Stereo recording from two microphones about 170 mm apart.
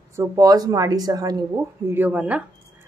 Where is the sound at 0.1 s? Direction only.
20° right (ahead or behind).